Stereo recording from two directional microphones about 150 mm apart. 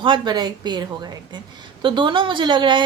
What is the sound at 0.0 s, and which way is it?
A woman's voice, 30° right (ahead or behind).